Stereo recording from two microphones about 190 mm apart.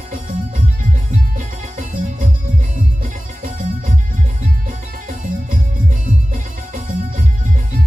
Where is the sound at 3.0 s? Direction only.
40° right (ahead or behind).